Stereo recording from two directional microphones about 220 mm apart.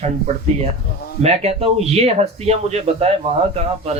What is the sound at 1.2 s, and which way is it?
Speech, 30° right (ahead or behind).